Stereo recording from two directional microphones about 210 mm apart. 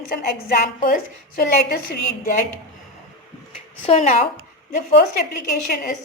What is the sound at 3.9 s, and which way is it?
Speech, 30° left (ahead or behind).